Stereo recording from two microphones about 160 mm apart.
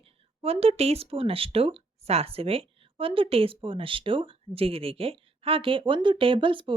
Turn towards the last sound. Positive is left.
turn(degrees=-30)  # may be behind; listen again after turning